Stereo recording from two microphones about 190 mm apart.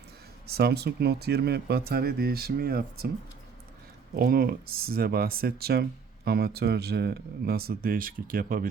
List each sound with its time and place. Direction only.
0.4 s speech: 55° right (ahead or behind)
4.1 s speech: 50° right (ahead or behind)